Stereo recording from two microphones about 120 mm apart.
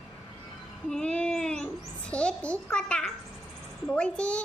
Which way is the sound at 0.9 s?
5° left (ahead or behind).